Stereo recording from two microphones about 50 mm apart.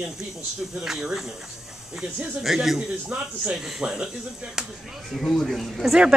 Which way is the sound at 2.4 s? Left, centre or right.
Centre.